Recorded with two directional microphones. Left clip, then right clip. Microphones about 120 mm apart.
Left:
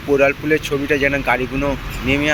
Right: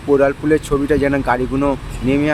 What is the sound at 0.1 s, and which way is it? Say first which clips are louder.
Speech: right 1 dB; 35° right (ahead or behind).